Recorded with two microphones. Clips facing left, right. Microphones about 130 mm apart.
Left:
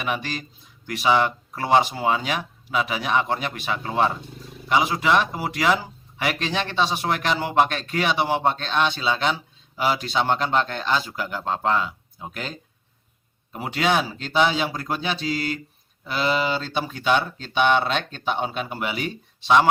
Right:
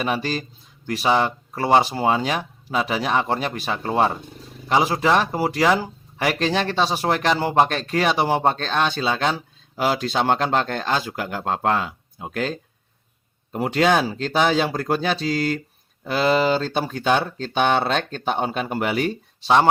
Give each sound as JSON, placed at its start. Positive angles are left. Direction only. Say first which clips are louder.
{"t": 0.0, "sound": "speech", "louder": "right 4 dB", "side_deg": -35}
{"t": 13.5, "sound": "speech", "louder": "right 4 dB", "side_deg": -45}